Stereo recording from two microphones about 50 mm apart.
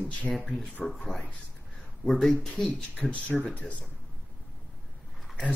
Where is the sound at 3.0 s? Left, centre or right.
Left.